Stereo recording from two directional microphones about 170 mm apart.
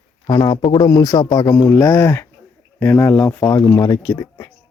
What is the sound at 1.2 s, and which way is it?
Speech, 35° left (ahead or behind).